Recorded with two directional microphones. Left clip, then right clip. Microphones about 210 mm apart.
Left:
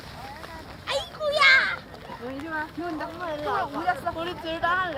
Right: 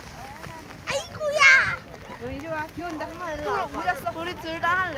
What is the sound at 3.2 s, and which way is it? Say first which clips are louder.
Speech: even; 30° right (ahead or behind).